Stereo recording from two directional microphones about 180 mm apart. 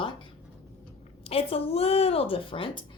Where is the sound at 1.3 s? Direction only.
35° left (ahead or behind).